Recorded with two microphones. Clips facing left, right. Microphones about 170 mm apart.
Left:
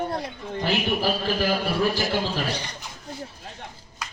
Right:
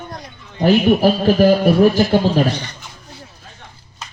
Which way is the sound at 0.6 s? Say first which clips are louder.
Right 12 dB; 50° right (ahead or behind).